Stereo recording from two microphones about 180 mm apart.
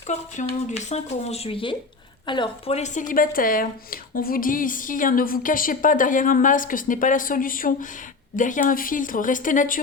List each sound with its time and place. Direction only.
0.1 s a woman's voice: 40° left (ahead or behind)